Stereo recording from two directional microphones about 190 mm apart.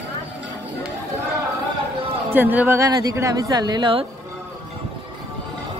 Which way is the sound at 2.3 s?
10° right (ahead or behind).